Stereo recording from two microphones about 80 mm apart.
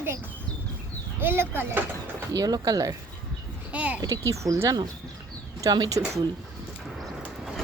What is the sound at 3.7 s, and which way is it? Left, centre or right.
Speech, centre.